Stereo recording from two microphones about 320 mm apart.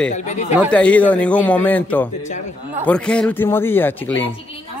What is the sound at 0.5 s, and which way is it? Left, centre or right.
A man's voice, centre.